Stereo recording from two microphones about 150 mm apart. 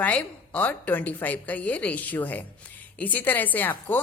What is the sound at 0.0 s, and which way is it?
A woman's voice, 10° left (ahead or behind).